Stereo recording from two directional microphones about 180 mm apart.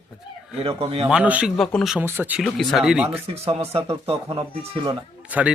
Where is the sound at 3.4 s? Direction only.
30° right (ahead or behind).